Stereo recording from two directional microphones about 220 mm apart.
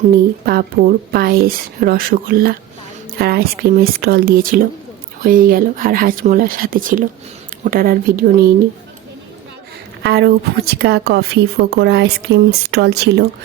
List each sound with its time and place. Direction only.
0.4 s a woman's voice: 40° right (ahead or behind)
10.0 s a woman's voice: 50° right (ahead or behind)